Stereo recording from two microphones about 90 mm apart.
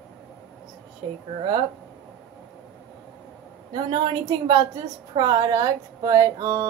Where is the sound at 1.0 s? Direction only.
65° right (ahead or behind).